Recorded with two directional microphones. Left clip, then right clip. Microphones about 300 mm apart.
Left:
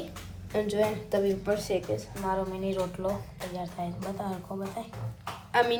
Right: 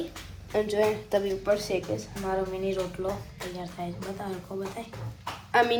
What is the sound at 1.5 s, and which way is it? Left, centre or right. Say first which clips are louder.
Speech: right 2 dB; centre.